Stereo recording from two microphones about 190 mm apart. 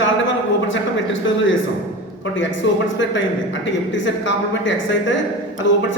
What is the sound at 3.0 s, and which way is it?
A man's voice, 75° left (ahead or behind).